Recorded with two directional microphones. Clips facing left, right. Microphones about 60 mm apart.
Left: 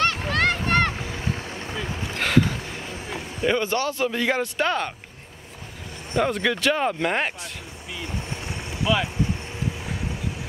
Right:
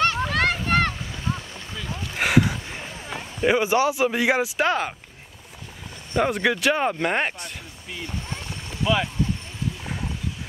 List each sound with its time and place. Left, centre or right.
0.3 s a sound: centre
0.7 s boat: centre
0.9 s boat: left
2.1 s boat: centre
3.1 s a man's voice: centre
6.1 s speech: centre
8.1 s vehicle: centre